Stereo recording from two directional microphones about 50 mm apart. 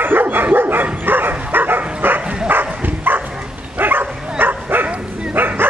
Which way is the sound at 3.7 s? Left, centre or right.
Right.